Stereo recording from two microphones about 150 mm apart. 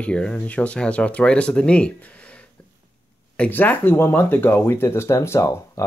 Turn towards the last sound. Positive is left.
turn(degrees=20)  # may be behind; listen again after turning